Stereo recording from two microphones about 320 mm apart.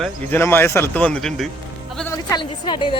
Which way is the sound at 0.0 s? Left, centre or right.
Centre.